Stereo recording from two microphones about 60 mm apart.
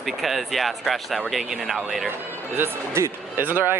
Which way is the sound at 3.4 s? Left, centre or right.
Right.